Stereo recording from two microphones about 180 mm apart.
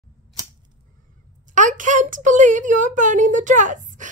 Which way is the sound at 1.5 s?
45° right (ahead or behind).